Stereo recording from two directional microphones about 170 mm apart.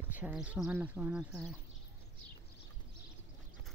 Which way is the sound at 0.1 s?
10° right (ahead or behind).